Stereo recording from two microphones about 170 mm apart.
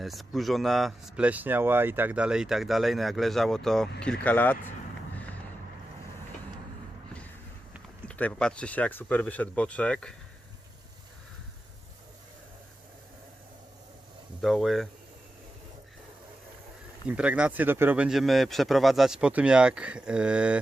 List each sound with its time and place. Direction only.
0.0 s speech: centre (ahead or behind)
8.0 s speech: 10° left (ahead or behind)
14.4 s speech: centre (ahead or behind)
17.1 s speech: 5° right (ahead or behind)